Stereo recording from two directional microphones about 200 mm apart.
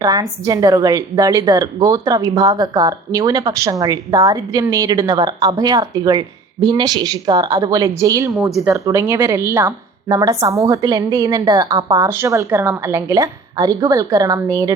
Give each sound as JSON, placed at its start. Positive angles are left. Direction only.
{"t": 0.0, "sound": "a woman's voice", "side_deg": -20}
{"t": 8.3, "sound": "a woman's voice", "side_deg": 0}
{"t": 8.7, "sound": "a woman's voice", "side_deg": -15}